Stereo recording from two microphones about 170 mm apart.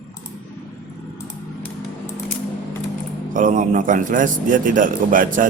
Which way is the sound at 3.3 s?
50° right (ahead or behind).